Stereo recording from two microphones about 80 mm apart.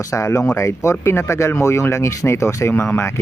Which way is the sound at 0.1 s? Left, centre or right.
Left.